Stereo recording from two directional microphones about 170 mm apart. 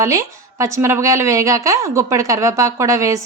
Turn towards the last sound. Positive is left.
turn(degrees=-20)  # may be behind; listen again after turning